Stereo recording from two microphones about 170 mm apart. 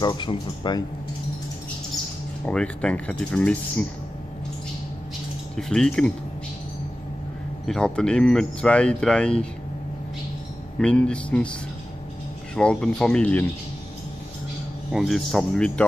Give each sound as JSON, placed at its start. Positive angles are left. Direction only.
{"t": 0.0, "sound": "speech", "side_deg": 25}
{"t": 2.4, "sound": "speech", "side_deg": 5}
{"t": 5.6, "sound": "speech", "side_deg": 5}
{"t": 7.6, "sound": "speech", "side_deg": 5}
{"t": 10.8, "sound": "speech", "side_deg": 5}
{"t": 12.5, "sound": "speech", "side_deg": 5}
{"t": 14.9, "sound": "speech", "side_deg": 0}